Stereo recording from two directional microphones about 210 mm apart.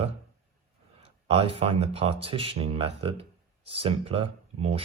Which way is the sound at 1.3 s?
25° right (ahead or behind).